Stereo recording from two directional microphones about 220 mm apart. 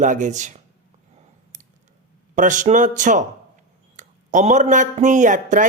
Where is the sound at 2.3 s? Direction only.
35° right (ahead or behind).